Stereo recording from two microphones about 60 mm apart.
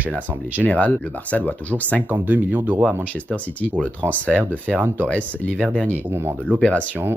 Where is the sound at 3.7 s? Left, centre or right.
Left.